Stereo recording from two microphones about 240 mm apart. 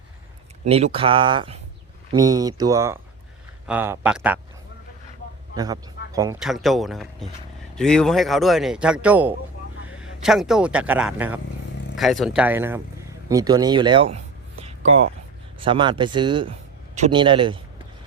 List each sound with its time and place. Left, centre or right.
0.6 s speech: right; by 4.4 s centre
5.5 s speech: centre
6.4 s speech: centre; by 17.6 s right